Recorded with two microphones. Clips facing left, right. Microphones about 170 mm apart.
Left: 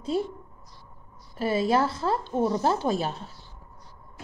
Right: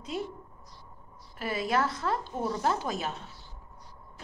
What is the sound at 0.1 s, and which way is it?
Speech, 35° left (ahead or behind).